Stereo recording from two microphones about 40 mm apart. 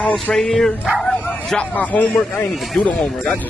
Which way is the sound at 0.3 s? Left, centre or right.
Centre.